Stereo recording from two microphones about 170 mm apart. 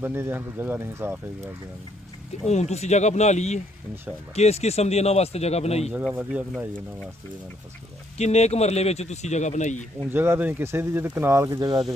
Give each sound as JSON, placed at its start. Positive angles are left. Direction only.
{"t": 0.0, "sound": "speech", "side_deg": -15}
{"t": 2.5, "sound": "speech", "side_deg": 40}
{"t": 6.1, "sound": "speech", "side_deg": -10}
{"t": 8.2, "sound": "speech", "side_deg": 40}
{"t": 10.0, "sound": "speech", "side_deg": -15}